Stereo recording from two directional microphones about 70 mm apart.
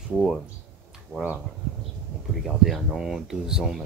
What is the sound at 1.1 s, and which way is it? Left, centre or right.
Speech, right.